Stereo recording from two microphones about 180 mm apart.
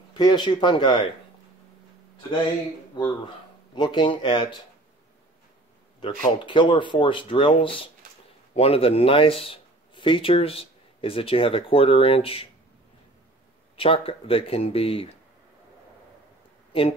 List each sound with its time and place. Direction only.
0.1 s speech: 25° left (ahead or behind)
3.0 s speech: 25° left (ahead or behind)
5.9 s speech: 25° left (ahead or behind)
13.7 s speech: 30° left (ahead or behind)